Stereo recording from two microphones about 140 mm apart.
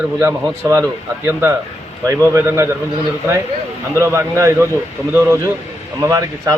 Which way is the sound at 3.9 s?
20° right (ahead or behind).